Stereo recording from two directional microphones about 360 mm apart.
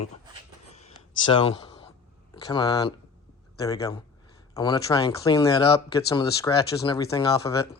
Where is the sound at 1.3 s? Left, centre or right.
Centre.